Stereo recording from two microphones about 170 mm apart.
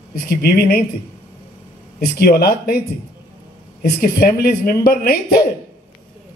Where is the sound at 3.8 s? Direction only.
65° left (ahead or behind).